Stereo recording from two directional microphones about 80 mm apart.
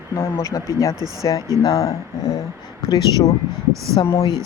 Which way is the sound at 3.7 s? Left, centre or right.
Right.